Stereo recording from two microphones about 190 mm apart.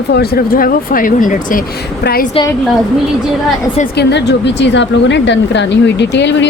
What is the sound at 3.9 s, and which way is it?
A woman's voice, 65° left (ahead or behind).